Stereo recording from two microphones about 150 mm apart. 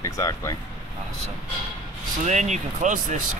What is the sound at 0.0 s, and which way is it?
Speech, 20° left (ahead or behind).